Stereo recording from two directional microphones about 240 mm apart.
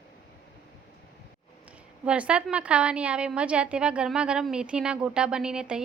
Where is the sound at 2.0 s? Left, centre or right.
Centre.